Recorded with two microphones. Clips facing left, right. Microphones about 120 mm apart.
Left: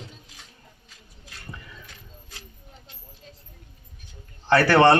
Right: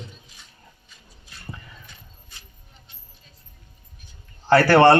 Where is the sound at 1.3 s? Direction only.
90° left.